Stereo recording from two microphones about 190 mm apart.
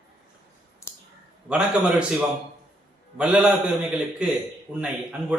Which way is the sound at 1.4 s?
5° right (ahead or behind).